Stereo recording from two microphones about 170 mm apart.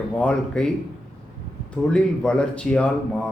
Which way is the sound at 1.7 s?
5° left (ahead or behind).